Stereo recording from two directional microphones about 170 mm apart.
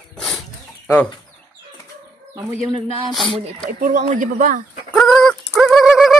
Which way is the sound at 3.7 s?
45° right (ahead or behind).